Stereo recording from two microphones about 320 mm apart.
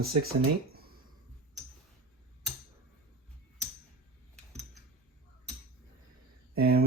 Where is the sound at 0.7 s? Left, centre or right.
Right.